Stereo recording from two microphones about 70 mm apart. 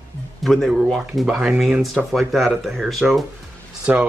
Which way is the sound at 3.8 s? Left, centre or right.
Centre.